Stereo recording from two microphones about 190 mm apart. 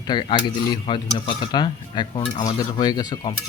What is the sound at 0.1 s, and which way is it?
Cutlery, 25° left (ahead or behind).